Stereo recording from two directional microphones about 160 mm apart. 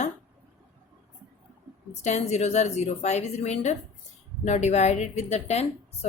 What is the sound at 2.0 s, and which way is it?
A woman's voice, 45° left (ahead or behind).